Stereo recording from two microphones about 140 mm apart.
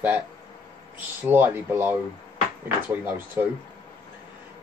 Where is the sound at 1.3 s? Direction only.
15° right (ahead or behind).